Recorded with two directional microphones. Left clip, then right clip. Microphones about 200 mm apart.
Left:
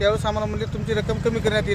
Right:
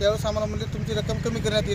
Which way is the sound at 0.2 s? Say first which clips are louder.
Left 2 dB; 5° left (ahead or behind).